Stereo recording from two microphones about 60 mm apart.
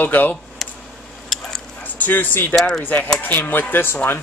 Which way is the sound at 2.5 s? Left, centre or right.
Centre.